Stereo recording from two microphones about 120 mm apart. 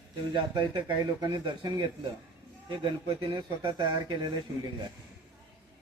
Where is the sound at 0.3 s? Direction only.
35° right (ahead or behind).